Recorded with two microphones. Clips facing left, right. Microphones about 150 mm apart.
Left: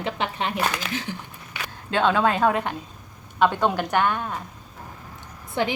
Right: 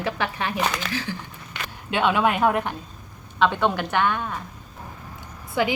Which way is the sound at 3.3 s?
10° left (ahead or behind).